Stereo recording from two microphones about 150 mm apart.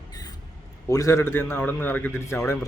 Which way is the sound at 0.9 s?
20° left (ahead or behind).